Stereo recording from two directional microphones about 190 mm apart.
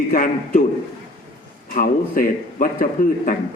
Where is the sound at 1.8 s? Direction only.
45° left (ahead or behind).